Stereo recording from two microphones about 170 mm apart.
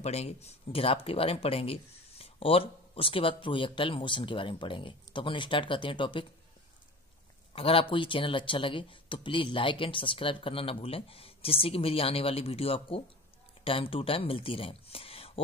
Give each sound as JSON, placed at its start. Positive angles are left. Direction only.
{"t": 0.0, "sound": "speech", "side_deg": 40}
{"t": 7.5, "sound": "speech", "side_deg": 35}